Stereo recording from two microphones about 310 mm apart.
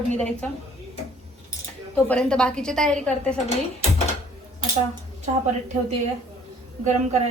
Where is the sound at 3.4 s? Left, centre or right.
Left.